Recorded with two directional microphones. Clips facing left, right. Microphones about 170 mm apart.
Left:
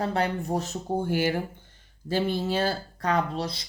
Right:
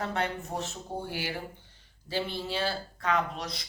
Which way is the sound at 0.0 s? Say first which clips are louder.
Left 5 dB; 35° left (ahead or behind).